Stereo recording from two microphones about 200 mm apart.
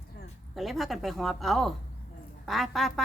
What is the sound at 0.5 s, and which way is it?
A woman's voice, centre (ahead or behind).